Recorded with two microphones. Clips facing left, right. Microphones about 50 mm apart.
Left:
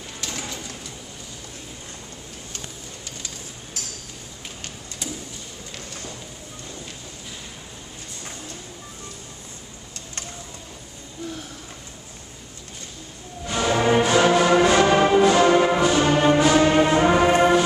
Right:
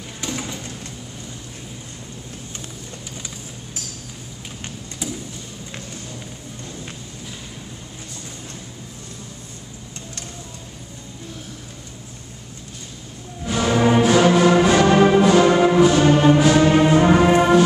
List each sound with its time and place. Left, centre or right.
0.2 s bird: centre
5.0 s a sound: centre
13.5 s music: centre